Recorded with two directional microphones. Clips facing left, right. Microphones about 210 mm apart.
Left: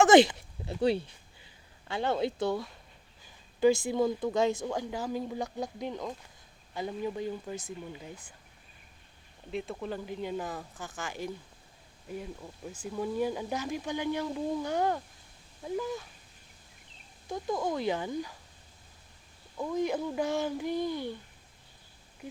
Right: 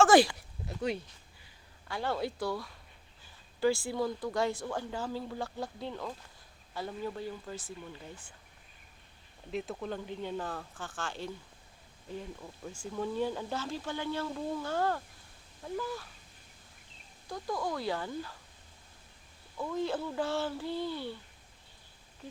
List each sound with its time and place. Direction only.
0.0 s a sound: 20° left (ahead or behind)
1.9 s speech: 20° left (ahead or behind)
9.5 s speech: centre (ahead or behind); by 16.0 s 20° left (ahead or behind)
17.2 s speech: 20° left (ahead or behind)
19.5 s speech: 15° left (ahead or behind)